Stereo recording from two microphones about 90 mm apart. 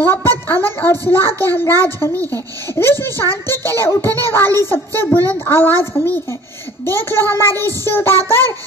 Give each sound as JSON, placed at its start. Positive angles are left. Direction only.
{"t": 0.0, "sound": "a woman's voice", "side_deg": 25}